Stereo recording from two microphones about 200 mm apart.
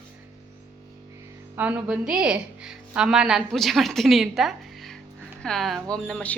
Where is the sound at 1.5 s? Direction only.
10° right (ahead or behind).